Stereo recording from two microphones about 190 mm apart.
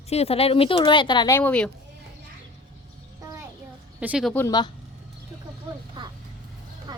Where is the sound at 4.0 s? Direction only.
5° right (ahead or behind).